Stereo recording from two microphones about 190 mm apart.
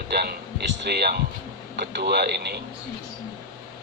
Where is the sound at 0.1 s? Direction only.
55° right (ahead or behind).